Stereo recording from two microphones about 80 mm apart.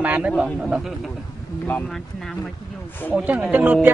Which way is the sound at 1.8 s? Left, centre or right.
Centre.